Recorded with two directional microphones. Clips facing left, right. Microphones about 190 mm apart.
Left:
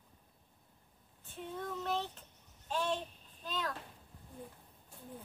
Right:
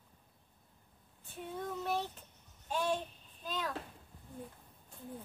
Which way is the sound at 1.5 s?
10° right (ahead or behind).